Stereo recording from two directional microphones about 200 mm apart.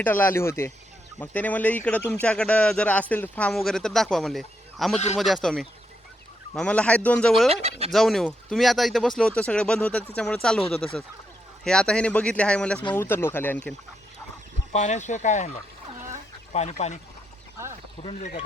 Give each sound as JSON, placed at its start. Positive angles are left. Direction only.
{"t": 0.0, "sound": "speech", "side_deg": 10}
{"t": 7.5, "sound": "speech", "side_deg": -30}
{"t": 7.9, "sound": "speech", "side_deg": 0}
{"t": 11.6, "sound": "speech", "side_deg": 5}
{"t": 14.7, "sound": "speech", "side_deg": 35}
{"t": 18.0, "sound": "speech", "side_deg": 30}